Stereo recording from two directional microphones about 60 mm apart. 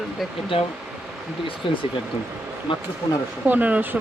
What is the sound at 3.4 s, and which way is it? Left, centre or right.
Speech, right.